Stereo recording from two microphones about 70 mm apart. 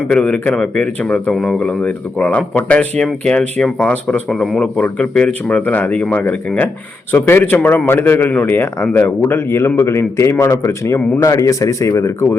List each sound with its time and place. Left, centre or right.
0.1 s a man's voice: centre; by 12.4 s left